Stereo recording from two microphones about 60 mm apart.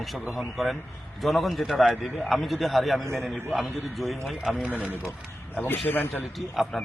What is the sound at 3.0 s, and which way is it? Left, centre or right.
Speech, right.